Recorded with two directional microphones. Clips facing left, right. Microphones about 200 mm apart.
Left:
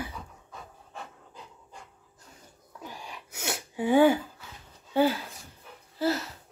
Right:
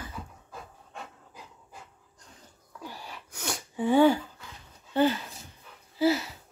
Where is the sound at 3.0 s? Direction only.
5° left (ahead or behind).